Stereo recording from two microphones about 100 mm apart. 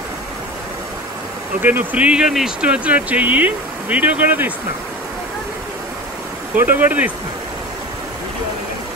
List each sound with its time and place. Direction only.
1.6 s speech: 20° right (ahead or behind)
6.6 s speech: 20° right (ahead or behind)